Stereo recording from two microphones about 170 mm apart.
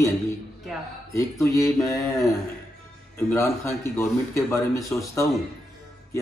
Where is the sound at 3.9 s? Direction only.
15° left (ahead or behind).